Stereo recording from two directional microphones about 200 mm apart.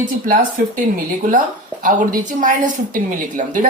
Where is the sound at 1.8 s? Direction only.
40° right (ahead or behind).